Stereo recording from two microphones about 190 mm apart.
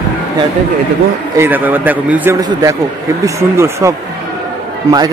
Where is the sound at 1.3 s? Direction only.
10° right (ahead or behind).